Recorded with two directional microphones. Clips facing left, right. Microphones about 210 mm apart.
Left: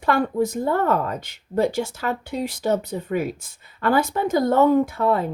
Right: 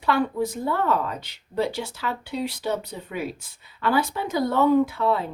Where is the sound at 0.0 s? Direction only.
45° left (ahead or behind).